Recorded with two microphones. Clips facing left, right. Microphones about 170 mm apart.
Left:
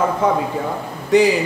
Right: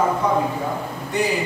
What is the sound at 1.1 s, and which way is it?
Speech, 90° left.